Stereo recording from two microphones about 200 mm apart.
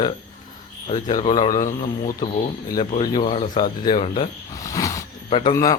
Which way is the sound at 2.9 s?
30° left (ahead or behind).